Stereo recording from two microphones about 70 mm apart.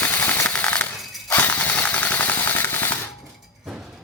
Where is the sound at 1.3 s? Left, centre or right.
Left.